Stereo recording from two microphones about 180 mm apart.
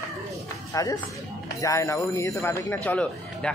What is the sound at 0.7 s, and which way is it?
Speech, 20° left (ahead or behind).